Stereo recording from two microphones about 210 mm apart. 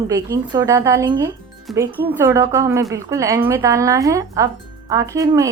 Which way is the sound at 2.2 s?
15° right (ahead or behind).